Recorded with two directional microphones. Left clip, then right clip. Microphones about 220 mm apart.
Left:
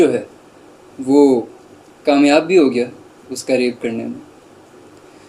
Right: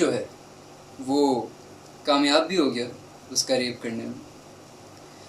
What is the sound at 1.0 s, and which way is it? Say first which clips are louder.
Speech: left 11 dB; 45° left (ahead or behind).